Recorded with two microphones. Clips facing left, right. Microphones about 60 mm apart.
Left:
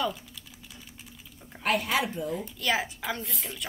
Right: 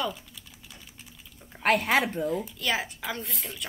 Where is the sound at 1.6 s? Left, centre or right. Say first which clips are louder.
Right 3 dB; right.